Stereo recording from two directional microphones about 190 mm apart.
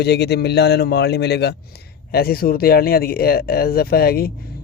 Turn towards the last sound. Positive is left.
turn(degrees=50)  # may be behind; listen again after turning